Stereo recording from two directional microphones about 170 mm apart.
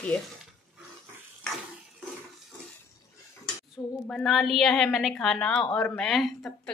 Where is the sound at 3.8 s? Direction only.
10° left (ahead or behind).